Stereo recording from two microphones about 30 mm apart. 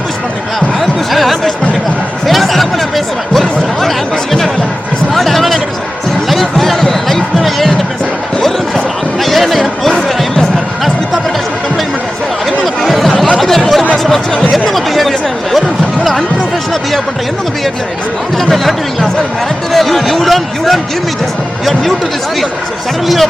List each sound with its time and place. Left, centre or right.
0.8 s music: centre
2.2 s a sound: centre
6.3 s music: centre
8.4 s basketball bounce: centre
9.2 s chatter: centre
12.5 s chatter: centre
13.9 s music: centre
14.5 s a sound: centre
18.3 s music: centre
19.7 s a sound: centre